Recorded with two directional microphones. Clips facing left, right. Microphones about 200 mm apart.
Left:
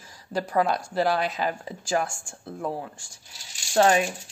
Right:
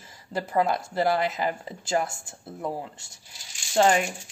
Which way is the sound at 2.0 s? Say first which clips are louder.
Left 1 dB; 20° right (ahead or behind).